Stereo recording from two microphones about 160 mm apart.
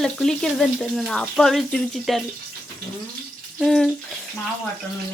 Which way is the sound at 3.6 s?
Centre (ahead or behind).